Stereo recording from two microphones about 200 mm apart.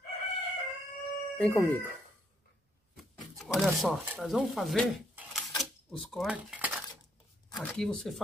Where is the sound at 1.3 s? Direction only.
5° left (ahead or behind).